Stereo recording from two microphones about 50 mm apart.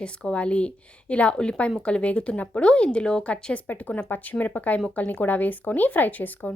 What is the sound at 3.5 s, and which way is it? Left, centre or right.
Speech, left.